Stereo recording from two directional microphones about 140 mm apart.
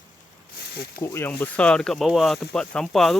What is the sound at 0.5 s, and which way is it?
Snake, 90° left.